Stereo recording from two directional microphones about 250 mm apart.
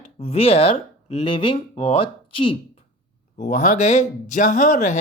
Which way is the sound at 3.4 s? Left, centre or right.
Left.